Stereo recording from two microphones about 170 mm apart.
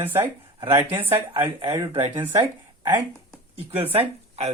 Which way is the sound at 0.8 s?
10° right (ahead or behind).